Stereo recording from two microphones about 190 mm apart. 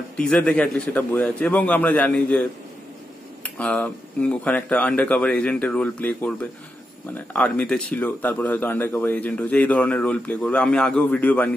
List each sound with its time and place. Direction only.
0.2 s speech: 5° left (ahead or behind)
3.4 s speech: 5° left (ahead or behind)